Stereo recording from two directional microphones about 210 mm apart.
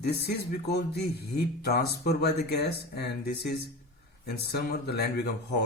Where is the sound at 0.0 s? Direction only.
50° left (ahead or behind).